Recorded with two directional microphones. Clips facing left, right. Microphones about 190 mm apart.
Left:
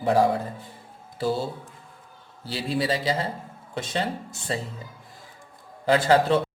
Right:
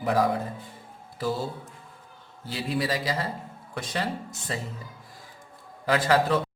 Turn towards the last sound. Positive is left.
turn(degrees=30)  # may be behind; listen again after turning